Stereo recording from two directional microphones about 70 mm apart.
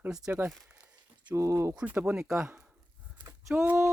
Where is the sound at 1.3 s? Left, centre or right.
Right.